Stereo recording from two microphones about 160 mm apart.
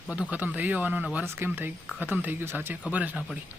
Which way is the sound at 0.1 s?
5° right (ahead or behind).